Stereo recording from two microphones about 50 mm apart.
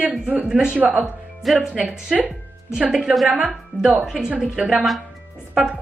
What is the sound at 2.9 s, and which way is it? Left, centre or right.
A woman's voice, centre.